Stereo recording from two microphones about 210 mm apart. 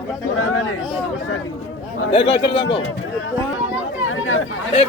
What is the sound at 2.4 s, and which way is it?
Speech, 55° left (ahead or behind).